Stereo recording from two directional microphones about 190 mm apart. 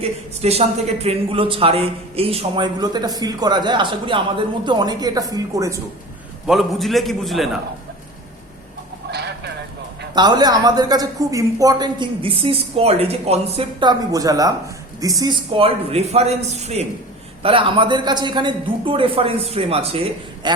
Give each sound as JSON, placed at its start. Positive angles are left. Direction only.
{"t": 0.0, "sound": "speech", "side_deg": -35}
{"t": 6.5, "sound": "a man's voice", "side_deg": 0}
{"t": 9.0, "sound": "a sound", "side_deg": -60}
{"t": 10.2, "sound": "a man's voice", "side_deg": -20}